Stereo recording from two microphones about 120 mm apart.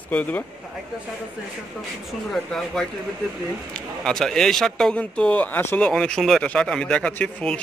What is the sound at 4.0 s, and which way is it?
Speech, 5° left (ahead or behind).